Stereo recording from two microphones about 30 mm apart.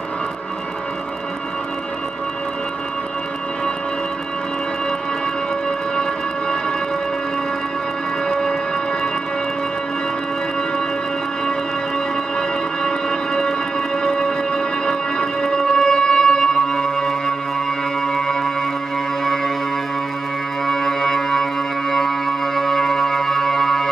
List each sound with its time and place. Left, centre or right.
8.3 s music: left
12.4 s music: left
20.6 s music: centre
22.6 s music: centre